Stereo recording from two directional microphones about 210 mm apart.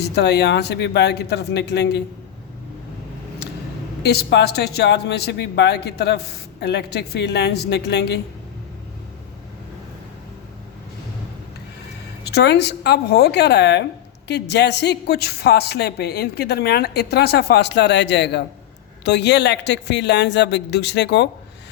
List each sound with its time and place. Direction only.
0.0 s speech: 50° left (ahead or behind)
4.0 s speech: 50° left (ahead or behind)
12.2 s speech: 50° left (ahead or behind)